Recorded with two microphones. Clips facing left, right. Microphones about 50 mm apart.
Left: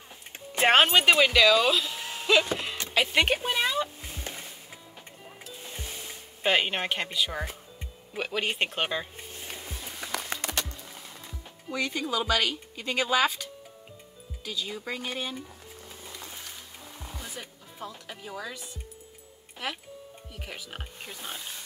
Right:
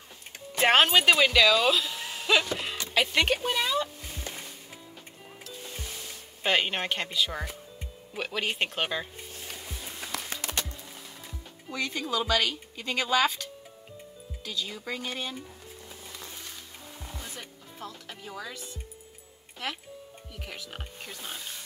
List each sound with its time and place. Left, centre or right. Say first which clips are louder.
0.6 s speech: left 1 dB; centre
3.3 s a sound: even; left
5.5 s music: even; centre
6.4 s speech: left 1 dB; centre
9.3 s music: left 1 dB; centre
9.8 s music: left 2 dB; centre
11.7 s speech: left 1 dB; centre
17.0 s music: left 1 dB; centre
20.3 s speech: even; centre